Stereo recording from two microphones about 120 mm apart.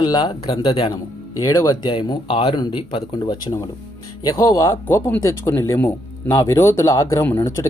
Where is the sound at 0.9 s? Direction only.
30° left (ahead or behind).